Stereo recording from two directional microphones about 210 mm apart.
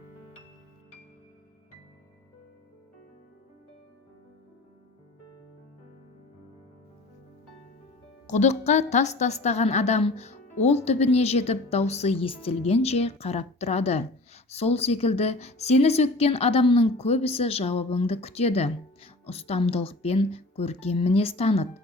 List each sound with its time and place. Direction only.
8.3 s a woman's voice: 35° left (ahead or behind)